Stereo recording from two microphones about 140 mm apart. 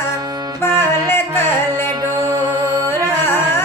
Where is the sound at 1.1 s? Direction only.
15° left (ahead or behind).